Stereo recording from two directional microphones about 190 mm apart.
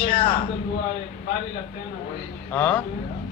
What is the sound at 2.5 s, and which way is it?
Speech, 10° left (ahead or behind).